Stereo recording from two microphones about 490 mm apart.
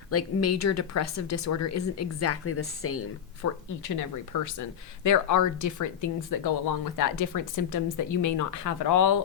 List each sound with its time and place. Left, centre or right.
0.1 s a woman's voice: left
3.8 s a woman's voice: left